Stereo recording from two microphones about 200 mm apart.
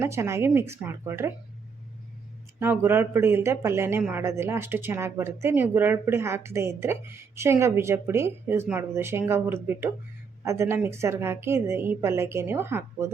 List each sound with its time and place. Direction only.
0.0 s speech: 15° right (ahead or behind)
2.6 s speech: 10° right (ahead or behind)